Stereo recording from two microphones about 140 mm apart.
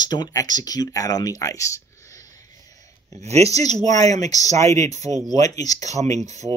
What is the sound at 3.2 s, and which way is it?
Speech, 50° right (ahead or behind).